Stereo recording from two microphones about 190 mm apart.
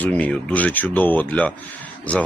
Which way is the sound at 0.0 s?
10° left (ahead or behind).